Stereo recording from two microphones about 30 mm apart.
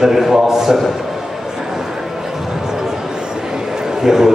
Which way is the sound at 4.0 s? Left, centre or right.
Centre.